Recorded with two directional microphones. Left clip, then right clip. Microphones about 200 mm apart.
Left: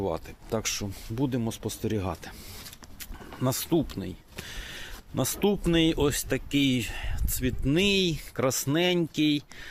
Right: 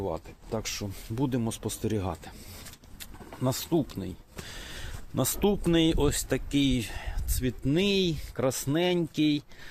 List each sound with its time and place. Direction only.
0.0 s speech: 30° left (ahead or behind)
0.9 s speech: centre (ahead or behind); by 9.4 s 15° left (ahead or behind)